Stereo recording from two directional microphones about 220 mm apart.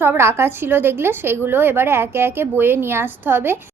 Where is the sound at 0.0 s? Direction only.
10° right (ahead or behind).